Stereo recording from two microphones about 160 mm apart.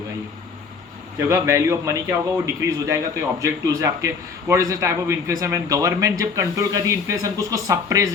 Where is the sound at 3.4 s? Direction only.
20° right (ahead or behind).